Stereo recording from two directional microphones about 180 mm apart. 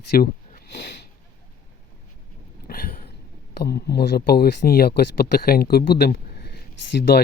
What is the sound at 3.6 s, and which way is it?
Speech, 60° left (ahead or behind).